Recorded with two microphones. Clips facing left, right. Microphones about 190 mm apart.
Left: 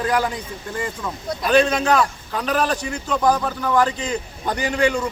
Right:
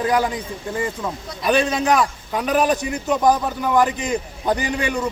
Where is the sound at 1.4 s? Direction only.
15° right (ahead or behind).